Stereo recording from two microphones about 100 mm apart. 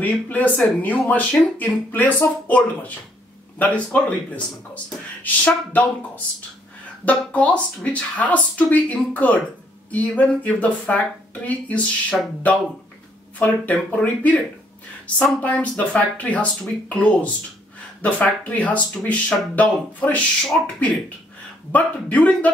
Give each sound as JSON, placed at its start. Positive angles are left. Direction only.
{"t": 0.0, "sound": "speech", "side_deg": 15}
{"t": 5.2, "sound": "speech", "side_deg": 15}
{"t": 13.4, "sound": "speech", "side_deg": 15}
{"t": 15.4, "sound": "speech", "side_deg": 15}